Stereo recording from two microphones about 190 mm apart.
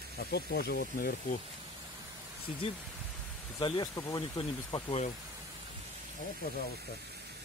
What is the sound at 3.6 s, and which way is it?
Speech, 25° left (ahead or behind).